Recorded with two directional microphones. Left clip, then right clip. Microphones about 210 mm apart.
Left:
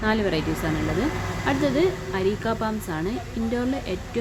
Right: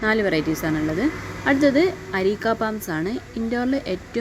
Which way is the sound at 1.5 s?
25° right (ahead or behind).